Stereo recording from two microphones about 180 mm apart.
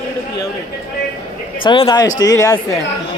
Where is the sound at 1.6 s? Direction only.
30° left (ahead or behind).